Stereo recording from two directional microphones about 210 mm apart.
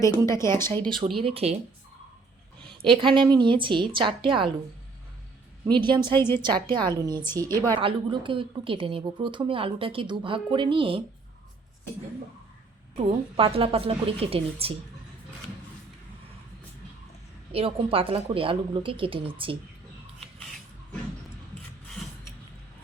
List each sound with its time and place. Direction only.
0.3 s speech: 10° left (ahead or behind)
1.2 s a woman's voice: 30° right (ahead or behind)
2.8 s a woman's voice: 25° right (ahead or behind)
5.6 s a woman's voice: 20° right (ahead or behind)
13.0 s a woman's voice: 25° right (ahead or behind)
17.5 s a woman's voice: 25° right (ahead or behind)